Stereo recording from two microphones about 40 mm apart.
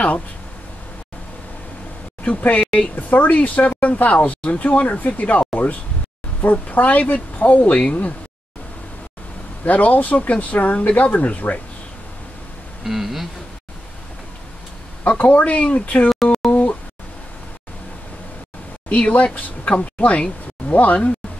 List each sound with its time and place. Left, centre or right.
2.2 s speech: left
9.7 s speech: left
12.8 s speech: centre
15.0 s speech: left
16.3 s a sound: left
18.9 s speech: left